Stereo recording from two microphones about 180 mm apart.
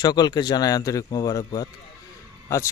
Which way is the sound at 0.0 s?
20° left (ahead or behind).